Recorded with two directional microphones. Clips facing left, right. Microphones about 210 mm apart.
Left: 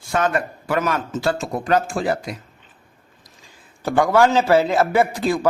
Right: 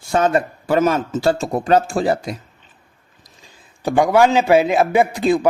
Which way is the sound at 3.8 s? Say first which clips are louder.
Right 2 dB; 15° right (ahead or behind).